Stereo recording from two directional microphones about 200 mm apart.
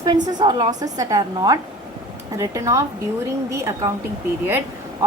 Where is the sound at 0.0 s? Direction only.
20° right (ahead or behind).